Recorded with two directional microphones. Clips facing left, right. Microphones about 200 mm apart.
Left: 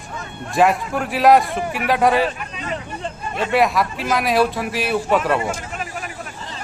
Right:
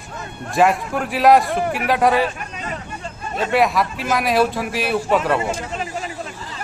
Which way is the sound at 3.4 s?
Centre (ahead or behind).